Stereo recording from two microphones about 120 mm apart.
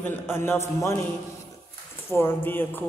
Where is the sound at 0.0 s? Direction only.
20° left (ahead or behind).